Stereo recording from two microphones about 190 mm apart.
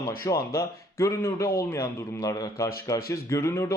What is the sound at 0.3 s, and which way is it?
A man's voice, 15° left (ahead or behind).